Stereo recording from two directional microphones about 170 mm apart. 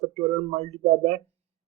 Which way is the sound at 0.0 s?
40° right (ahead or behind).